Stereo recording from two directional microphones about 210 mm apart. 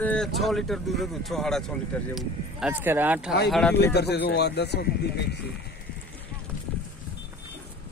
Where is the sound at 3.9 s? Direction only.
50° left (ahead or behind).